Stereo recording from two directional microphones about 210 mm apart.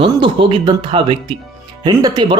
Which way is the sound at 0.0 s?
25° right (ahead or behind).